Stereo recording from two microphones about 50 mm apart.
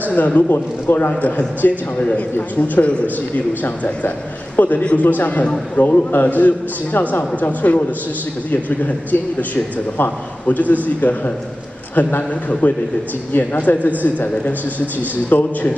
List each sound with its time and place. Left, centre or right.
0.1 s a man's voice: left
0.5 s a man's voice: left
9.1 s a man's voice: left